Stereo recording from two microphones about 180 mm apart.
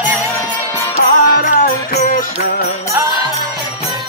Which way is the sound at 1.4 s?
50° left (ahead or behind).